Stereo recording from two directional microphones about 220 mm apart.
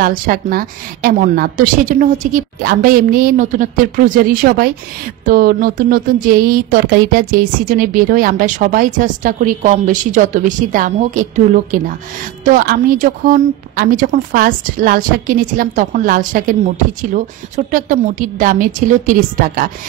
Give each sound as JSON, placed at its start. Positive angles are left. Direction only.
{"t": 0.0, "sound": "speech", "side_deg": -40}